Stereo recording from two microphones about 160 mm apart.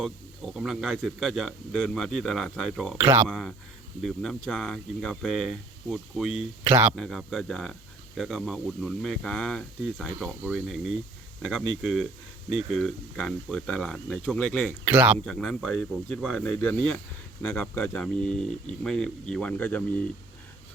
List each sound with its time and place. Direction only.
0.0 s speech: centre (ahead or behind)
3.0 s speech: 15° right (ahead or behind)
3.2 s speech: centre (ahead or behind)
6.7 s speech: 15° right (ahead or behind)
6.9 s speech: 5° left (ahead or behind)
14.8 s speech: 10° right (ahead or behind)
15.2 s speech: centre (ahead or behind)